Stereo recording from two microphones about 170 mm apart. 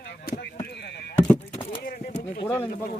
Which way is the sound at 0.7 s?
80° left.